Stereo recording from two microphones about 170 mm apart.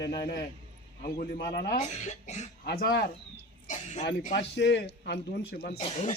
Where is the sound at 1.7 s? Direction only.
45° left (ahead or behind).